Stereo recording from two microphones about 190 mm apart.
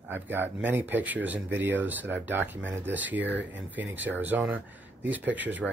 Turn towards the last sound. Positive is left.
turn(degrees=-10)  # may be behind; listen again after turning